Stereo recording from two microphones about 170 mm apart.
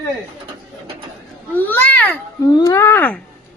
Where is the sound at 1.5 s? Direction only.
10° left (ahead or behind).